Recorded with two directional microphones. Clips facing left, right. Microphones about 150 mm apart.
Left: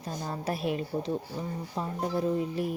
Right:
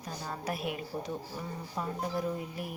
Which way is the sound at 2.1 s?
30° left (ahead or behind).